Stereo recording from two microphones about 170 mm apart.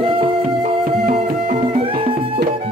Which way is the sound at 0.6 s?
60° right (ahead or behind).